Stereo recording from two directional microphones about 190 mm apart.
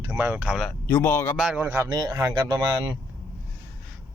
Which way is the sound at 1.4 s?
5° right (ahead or behind).